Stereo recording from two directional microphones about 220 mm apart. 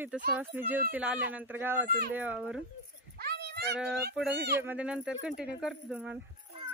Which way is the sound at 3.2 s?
45° right (ahead or behind).